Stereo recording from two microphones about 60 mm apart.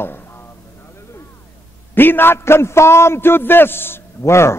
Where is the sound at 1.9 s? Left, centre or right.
Left.